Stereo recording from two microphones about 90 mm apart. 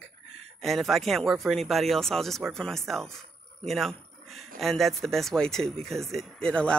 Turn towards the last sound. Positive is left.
turn(degrees=10)  # may be behind; listen again after turning